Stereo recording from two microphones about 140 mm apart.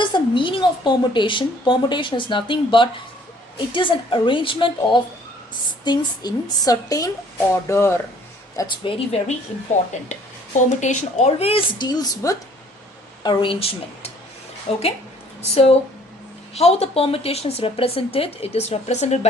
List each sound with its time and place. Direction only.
0.0 s a woman's voice: 35° left (ahead or behind); by 7.9 s 20° left (ahead or behind)
8.5 s a woman's voice: 35° left (ahead or behind)
10.7 s a woman's voice: 60° left (ahead or behind); by 12.4 s 25° left (ahead or behind)
13.2 s a woman's voice: 40° left (ahead or behind)
16.6 s speech: 45° left (ahead or behind)